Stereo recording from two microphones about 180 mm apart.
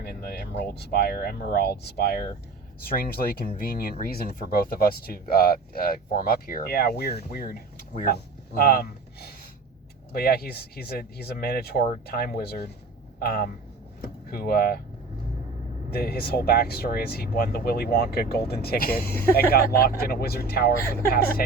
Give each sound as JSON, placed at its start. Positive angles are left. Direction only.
{"t": 0.0, "sound": "speech", "side_deg": 60}
{"t": 15.9, "sound": "speech", "side_deg": 60}